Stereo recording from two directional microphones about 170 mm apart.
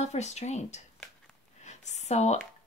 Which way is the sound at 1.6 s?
45° left (ahead or behind).